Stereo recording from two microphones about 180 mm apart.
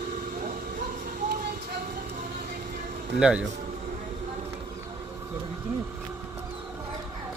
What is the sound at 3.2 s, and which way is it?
Speech, 5° right (ahead or behind).